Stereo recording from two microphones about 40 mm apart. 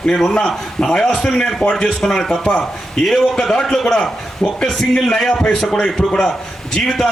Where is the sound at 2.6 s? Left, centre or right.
Centre.